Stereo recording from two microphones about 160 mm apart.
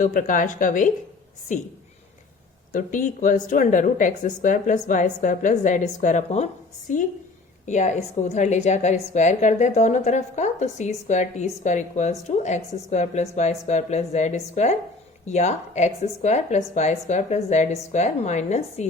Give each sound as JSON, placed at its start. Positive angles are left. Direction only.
{"t": 0.0, "sound": "a woman's voice", "side_deg": 55}
{"t": 2.7, "sound": "a woman's voice", "side_deg": 55}